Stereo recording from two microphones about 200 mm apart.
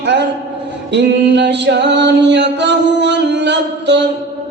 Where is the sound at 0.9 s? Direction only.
60° right (ahead or behind).